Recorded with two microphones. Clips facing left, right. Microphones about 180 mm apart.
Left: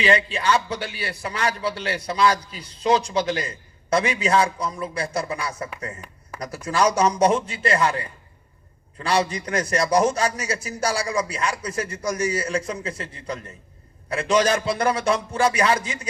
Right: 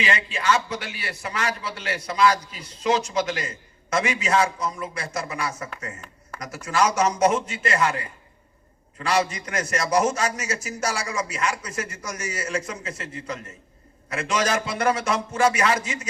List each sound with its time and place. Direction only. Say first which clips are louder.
0.0 s a man's voice: left 4 dB; 30° left (ahead or behind)
6.7 s a man's voice: left 2 dB; 30° left (ahead or behind)
9.0 s a man's voice: left 1 dB; 30° left (ahead or behind)